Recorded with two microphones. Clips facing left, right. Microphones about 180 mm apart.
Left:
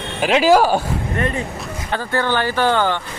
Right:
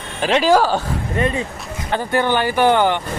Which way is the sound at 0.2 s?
10° left (ahead or behind).